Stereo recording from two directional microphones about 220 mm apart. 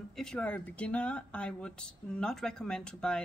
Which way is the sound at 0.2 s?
5° left (ahead or behind).